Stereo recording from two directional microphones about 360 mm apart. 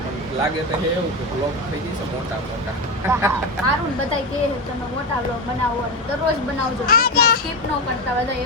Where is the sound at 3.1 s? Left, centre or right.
Centre.